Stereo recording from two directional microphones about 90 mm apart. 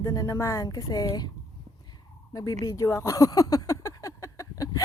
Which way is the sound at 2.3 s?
40° left (ahead or behind).